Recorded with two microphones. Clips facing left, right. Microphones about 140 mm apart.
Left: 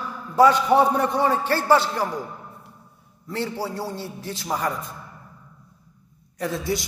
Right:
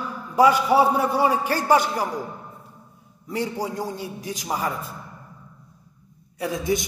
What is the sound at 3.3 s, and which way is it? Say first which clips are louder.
A man's voice: right 1 dB; 15° right (ahead or behind).